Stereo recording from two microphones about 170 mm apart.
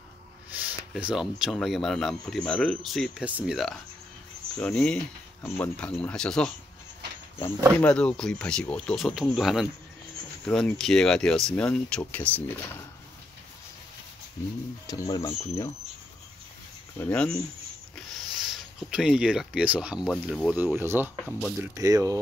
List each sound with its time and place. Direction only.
0.5 s speech: 10° right (ahead or behind)
7.8 s speech: 5° left (ahead or behind)
14.9 s speech: 20° left (ahead or behind)
17.1 s speech: 5° left (ahead or behind); by 21.1 s 10° right (ahead or behind)
21.3 s speech: centre (ahead or behind)
21.5 s speech: 20° right (ahead or behind)